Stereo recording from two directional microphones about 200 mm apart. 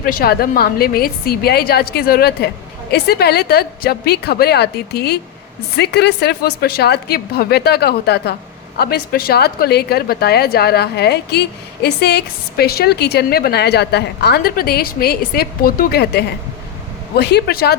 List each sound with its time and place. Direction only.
0.0 s a woman's voice: 45° left (ahead or behind)